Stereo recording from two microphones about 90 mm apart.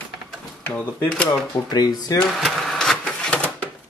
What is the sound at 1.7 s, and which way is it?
Speech, 50° left (ahead or behind).